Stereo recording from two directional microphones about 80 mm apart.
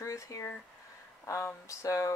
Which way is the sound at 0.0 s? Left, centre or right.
Left.